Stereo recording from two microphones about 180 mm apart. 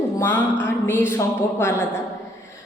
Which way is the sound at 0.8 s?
15° left (ahead or behind).